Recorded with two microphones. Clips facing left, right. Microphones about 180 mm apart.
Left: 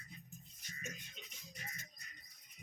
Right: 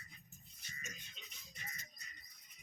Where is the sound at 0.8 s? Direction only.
55° left (ahead or behind).